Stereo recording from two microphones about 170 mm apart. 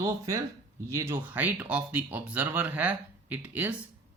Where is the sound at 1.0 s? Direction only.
15° right (ahead or behind).